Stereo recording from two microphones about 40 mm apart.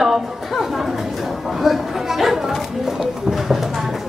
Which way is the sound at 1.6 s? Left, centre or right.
Centre.